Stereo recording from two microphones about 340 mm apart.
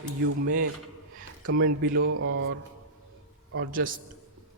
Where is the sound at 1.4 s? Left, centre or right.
Right.